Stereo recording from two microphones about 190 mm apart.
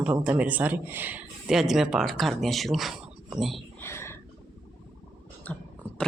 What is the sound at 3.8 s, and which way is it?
Whispering, 15° left (ahead or behind).